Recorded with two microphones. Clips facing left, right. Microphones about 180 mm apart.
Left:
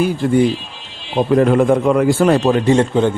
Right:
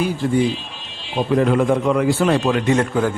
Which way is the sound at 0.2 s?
55° left (ahead or behind).